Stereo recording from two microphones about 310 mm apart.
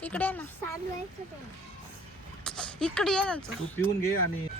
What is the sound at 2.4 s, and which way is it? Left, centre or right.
Speech, centre.